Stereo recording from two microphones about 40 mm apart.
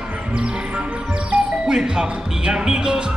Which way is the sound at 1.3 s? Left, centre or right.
Right.